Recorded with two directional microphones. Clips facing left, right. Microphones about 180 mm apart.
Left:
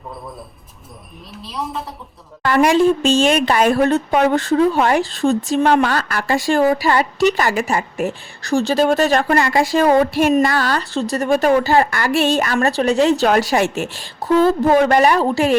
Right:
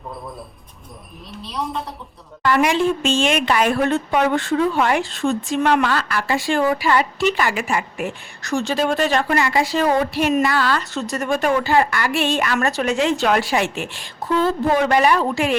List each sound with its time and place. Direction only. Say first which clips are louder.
1.3 s a woman's voice: even; centre (ahead or behind)
2.4 s a woman's voice: left 4 dB; 45° left (ahead or behind)